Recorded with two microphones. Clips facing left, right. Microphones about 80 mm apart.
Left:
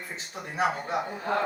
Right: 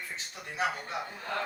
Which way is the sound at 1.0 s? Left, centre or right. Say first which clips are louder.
Left 8 dB; centre.